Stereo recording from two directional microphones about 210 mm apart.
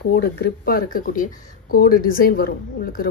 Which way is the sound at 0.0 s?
50° left (ahead or behind).